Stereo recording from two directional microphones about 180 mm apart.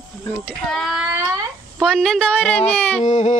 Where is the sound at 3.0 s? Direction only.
40° left (ahead or behind).